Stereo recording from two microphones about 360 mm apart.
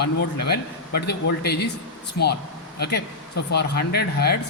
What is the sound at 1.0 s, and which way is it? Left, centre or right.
Speech, left.